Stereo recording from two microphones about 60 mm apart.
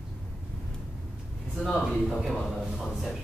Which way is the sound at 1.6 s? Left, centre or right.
Centre.